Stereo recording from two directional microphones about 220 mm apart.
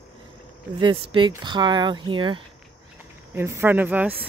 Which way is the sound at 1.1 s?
20° right (ahead or behind).